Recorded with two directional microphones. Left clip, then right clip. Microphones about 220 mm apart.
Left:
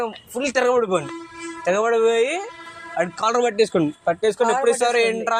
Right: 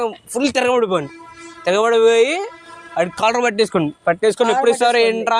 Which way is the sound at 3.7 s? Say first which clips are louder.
Right 3 dB; 35° right (ahead or behind).